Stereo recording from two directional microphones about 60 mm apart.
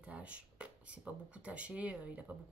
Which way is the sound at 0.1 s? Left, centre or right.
Centre.